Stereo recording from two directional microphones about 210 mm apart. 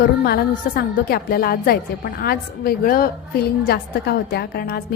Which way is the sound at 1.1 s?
45° left (ahead or behind).